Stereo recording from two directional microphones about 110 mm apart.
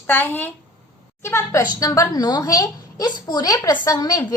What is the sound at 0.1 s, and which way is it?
A woman's voice, 15° left (ahead or behind).